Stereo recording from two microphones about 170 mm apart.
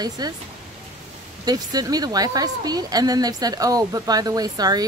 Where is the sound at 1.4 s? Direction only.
20° right (ahead or behind).